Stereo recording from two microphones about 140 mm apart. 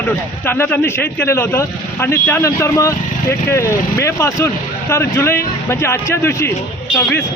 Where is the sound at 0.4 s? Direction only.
15° left (ahead or behind).